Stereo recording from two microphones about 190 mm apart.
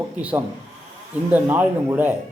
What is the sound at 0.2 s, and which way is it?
Speech, 5° right (ahead or behind).